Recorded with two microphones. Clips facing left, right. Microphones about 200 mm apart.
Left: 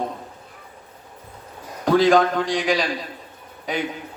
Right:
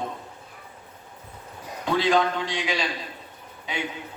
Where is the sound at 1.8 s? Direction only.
50° left (ahead or behind).